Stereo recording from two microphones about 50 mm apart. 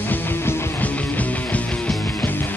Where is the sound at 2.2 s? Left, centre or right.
Left.